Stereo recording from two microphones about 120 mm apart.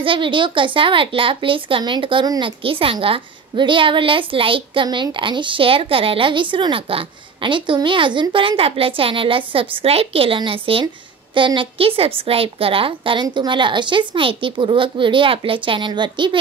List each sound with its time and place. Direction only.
0.0 s a woman's voice: 45° right (ahead or behind)
2.6 s a woman's voice: 50° right (ahead or behind)